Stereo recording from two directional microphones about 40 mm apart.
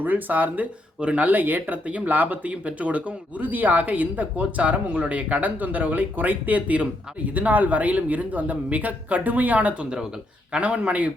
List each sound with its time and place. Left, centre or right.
0.0 s speech: right
1.6 s a woman's voice: right